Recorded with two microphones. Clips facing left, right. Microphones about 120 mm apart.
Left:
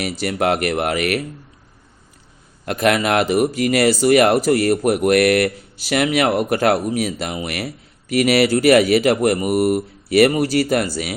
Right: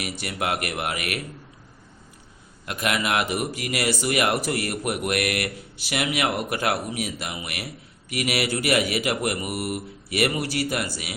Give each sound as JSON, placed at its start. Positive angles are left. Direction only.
{"t": 0.0, "sound": "a man's voice", "side_deg": 40}
{"t": 2.6, "sound": "a man's voice", "side_deg": 45}